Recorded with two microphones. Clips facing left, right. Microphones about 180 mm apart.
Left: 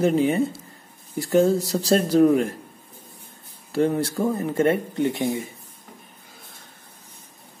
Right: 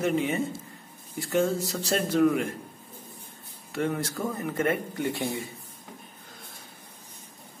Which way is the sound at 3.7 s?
30° left (ahead or behind).